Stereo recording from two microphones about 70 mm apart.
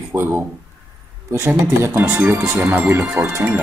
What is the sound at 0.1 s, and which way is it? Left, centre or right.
Speech, right.